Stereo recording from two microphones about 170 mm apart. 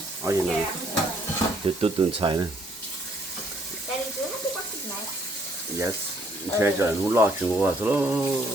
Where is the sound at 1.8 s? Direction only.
30° right (ahead or behind).